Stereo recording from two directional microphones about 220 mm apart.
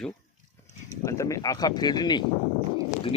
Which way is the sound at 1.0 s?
15° left (ahead or behind).